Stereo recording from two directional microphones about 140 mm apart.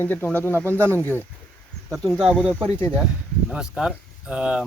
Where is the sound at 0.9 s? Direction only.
10° left (ahead or behind).